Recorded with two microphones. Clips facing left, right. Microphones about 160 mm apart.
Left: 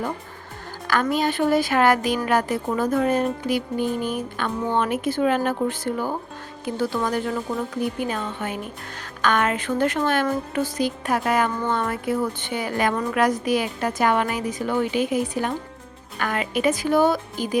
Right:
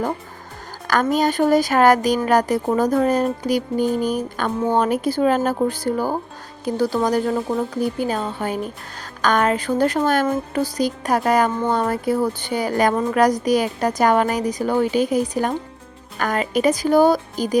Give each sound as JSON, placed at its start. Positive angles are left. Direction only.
{"t": 1.1, "sound": "speech", "side_deg": -40}